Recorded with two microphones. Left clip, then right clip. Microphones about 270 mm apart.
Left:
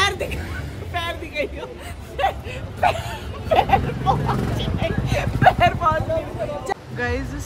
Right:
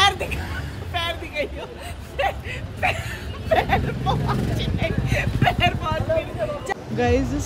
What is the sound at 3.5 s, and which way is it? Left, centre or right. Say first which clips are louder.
Vehicle: left 3 dB; centre.